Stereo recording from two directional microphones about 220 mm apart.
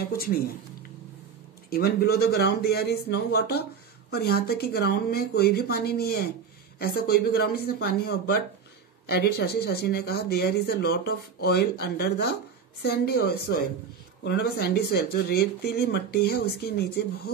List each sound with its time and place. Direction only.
1.7 s speech: 45° left (ahead or behind)